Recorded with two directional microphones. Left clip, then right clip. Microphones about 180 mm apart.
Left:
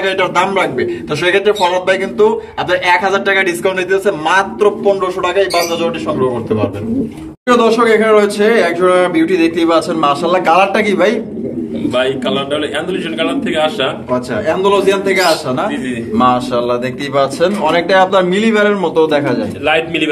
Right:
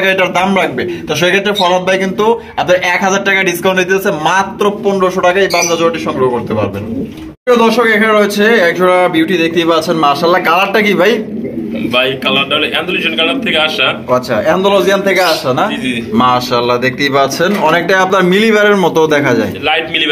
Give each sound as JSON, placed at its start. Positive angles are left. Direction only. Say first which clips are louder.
{"t": 0.0, "sound": "a man's voice", "louder": "right 2 dB", "side_deg": -35}
{"t": 7.4, "sound": "a man's voice", "louder": "right 1 dB", "side_deg": -35}
{"t": 13.2, "sound": "a man's voice", "louder": "right 1 dB", "side_deg": 15}
{"t": 14.1, "sound": "a man's voice", "louder": "right 4 dB", "side_deg": -40}
{"t": 19.6, "sound": "a man's voice", "louder": "right 1 dB", "side_deg": 45}